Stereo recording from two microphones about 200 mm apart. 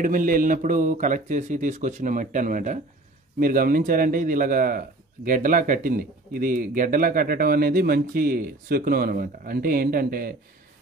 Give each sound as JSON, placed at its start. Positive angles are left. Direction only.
{"t": 0.0, "sound": "speech", "side_deg": -45}